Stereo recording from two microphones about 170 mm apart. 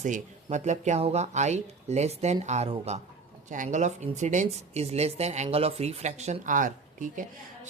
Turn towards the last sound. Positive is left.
turn(degrees=-50)  # may be behind; listen again after turning